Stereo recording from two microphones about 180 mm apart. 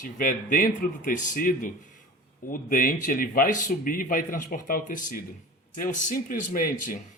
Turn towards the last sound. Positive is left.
turn(degrees=50)  # may be behind; listen again after turning